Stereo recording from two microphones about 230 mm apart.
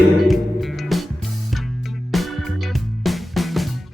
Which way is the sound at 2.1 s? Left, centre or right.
Centre.